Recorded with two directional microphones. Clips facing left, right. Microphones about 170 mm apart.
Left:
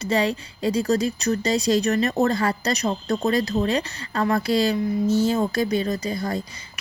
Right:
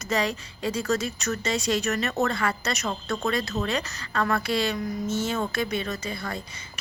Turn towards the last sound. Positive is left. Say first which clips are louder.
# left 7 dB
turn(degrees=35)  # may be behind; listen again after turning